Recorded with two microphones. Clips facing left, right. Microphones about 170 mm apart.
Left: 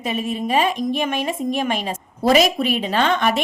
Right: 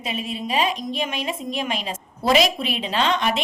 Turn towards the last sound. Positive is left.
turn(degrees=50)  # may be behind; listen again after turning